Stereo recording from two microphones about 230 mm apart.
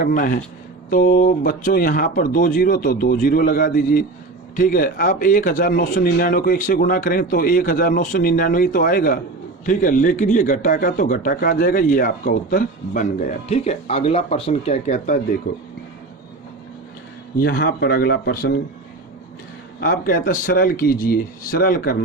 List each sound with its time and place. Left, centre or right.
0.0 s a man's voice: left
17.3 s speech: left
19.8 s a man's voice: left